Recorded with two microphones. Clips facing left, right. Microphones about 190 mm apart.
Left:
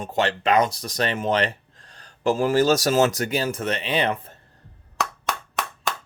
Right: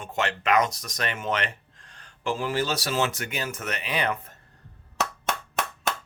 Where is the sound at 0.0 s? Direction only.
35° left (ahead or behind).